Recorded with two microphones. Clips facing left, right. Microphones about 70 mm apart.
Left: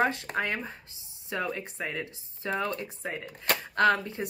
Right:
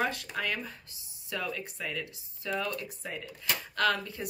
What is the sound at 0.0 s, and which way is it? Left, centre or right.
Speech, left.